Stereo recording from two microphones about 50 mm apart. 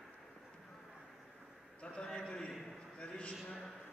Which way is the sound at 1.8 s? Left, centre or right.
Centre.